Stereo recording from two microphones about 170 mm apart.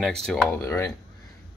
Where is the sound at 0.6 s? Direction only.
15° left (ahead or behind).